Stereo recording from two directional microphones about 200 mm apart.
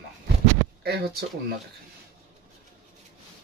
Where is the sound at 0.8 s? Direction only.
50° right (ahead or behind).